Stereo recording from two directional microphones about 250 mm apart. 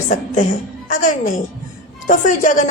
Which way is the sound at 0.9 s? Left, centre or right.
Left.